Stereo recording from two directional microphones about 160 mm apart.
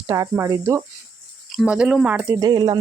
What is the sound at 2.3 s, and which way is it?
Speech, 25° right (ahead or behind).